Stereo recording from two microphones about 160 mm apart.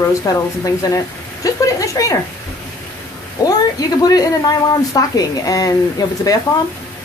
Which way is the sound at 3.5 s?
25° left (ahead or behind).